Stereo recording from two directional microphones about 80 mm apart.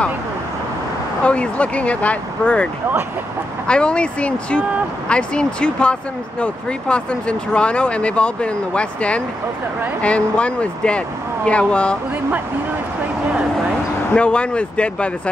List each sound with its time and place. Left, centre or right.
1.2 s speech: centre
14.1 s speech: centre